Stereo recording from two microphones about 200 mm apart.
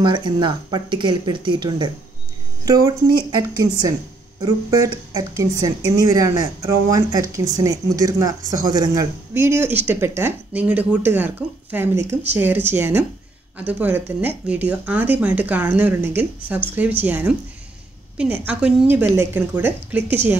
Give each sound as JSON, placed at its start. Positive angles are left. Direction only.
{"t": 0.0, "sound": "speech", "side_deg": -25}